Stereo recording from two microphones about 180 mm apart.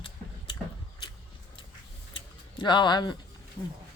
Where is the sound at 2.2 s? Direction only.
25° left (ahead or behind).